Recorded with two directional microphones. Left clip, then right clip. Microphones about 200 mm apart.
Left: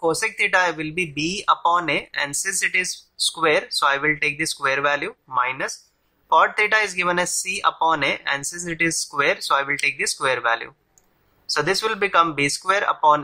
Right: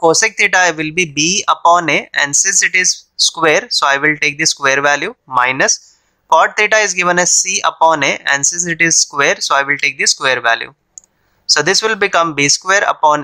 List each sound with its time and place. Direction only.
0.0 s speech: 35° right (ahead or behind)